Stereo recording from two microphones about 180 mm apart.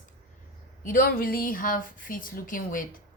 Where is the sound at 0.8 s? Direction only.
50° left (ahead or behind).